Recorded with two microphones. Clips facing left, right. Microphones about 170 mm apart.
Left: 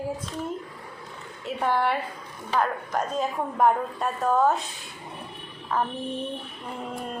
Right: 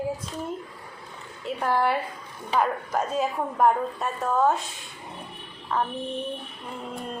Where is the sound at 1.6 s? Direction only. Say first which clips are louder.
Even; centre (ahead or behind).